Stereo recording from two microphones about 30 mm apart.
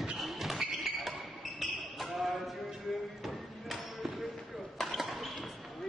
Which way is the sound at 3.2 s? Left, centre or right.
Centre.